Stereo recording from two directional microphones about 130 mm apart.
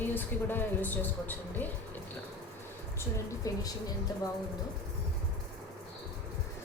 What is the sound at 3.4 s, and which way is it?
Speech, 25° left (ahead or behind).